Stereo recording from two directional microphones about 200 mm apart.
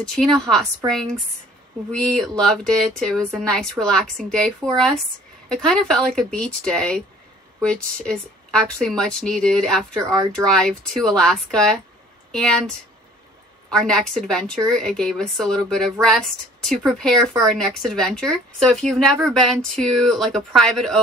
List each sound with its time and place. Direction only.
0.0 s speech: 5° left (ahead or behind)
0.8 s speech: 20° right (ahead or behind)
1.9 s speech: 5° left (ahead or behind)